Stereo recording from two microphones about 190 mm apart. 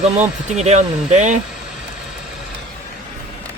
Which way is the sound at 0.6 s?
35° right (ahead or behind).